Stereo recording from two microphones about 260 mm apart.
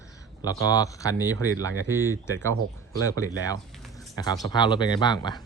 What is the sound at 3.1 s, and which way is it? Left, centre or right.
A man's voice, centre.